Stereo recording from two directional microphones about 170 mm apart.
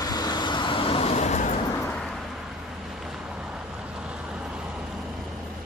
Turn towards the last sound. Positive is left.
turn(degrees=-5)  # may be behind; listen again after turning